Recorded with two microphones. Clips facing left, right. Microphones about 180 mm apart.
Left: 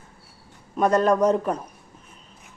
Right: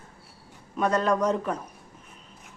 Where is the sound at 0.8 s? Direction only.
45° left (ahead or behind).